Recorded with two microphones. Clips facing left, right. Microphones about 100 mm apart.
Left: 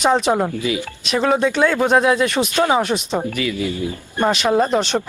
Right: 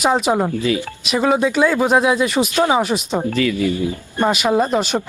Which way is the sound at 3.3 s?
20° left (ahead or behind).